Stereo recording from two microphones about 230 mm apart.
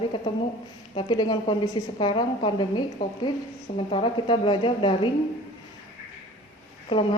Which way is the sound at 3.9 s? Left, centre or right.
Left.